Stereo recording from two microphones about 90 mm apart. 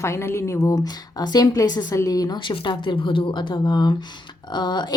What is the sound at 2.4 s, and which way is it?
Speech, 65° left (ahead or behind).